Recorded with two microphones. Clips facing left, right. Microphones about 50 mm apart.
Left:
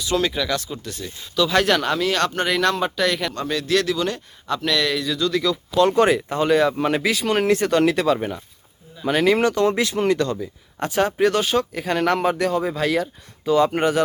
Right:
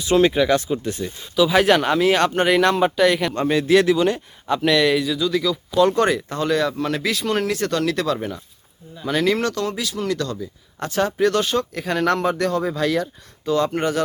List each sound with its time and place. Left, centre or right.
0.0 s speech: right
1.4 s speech: centre
3.3 s speech: right; by 7.0 s left
7.0 s speech: centre
7.6 s speech: centre
9.6 s speech: left; by 14.0 s centre